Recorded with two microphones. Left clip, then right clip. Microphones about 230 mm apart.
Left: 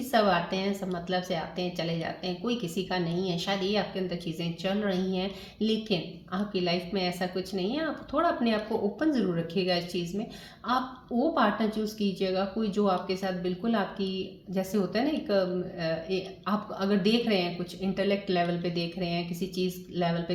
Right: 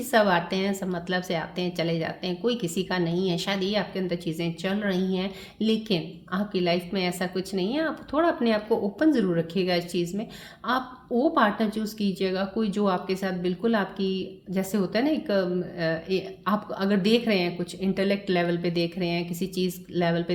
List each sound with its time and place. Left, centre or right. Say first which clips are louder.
0.1 s a woman's voice: right 3 dB; right
11.2 s a woman's voice: right 3 dB; right